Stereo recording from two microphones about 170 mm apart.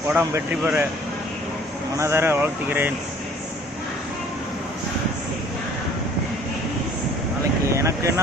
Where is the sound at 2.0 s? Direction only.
15° right (ahead or behind).